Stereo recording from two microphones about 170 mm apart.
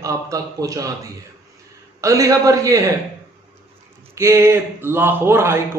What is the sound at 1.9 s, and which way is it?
Speech, 20° right (ahead or behind).